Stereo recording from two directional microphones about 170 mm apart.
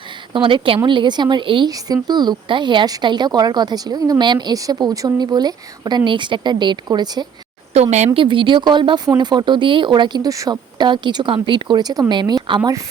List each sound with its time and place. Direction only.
0.3 s a woman's voice: 30° right (ahead or behind)
7.7 s a woman's voice: 40° right (ahead or behind); by 12.8 s 20° right (ahead or behind)